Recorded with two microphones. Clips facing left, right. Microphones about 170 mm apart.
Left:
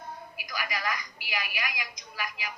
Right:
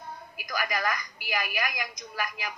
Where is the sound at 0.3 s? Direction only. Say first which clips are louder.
Right 6 dB; 45° right (ahead or behind).